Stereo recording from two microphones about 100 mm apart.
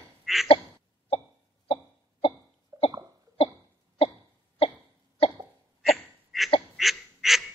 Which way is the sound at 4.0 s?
70° left (ahead or behind).